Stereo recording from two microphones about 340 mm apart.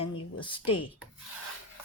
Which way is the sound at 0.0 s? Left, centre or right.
Centre.